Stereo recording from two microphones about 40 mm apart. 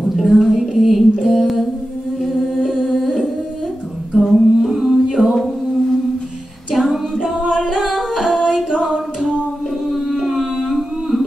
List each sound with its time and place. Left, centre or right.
0.1 s a sound: centre
2.2 s humming: centre
4.1 s singing: centre
5.0 s a capella: centre
6.7 s a capella: centre
7.5 s singing: centre
9.8 s a sound: centre